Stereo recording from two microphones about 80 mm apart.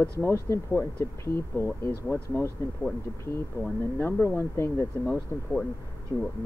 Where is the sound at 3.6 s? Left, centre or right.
Left.